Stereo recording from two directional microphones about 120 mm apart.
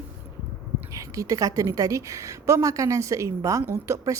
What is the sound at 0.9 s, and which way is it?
A woman's voice, 30° right (ahead or behind).